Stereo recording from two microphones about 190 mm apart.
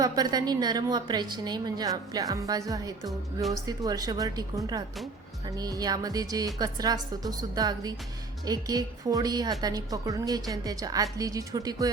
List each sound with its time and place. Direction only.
0.0 s a woman's voice: 20° right (ahead or behind)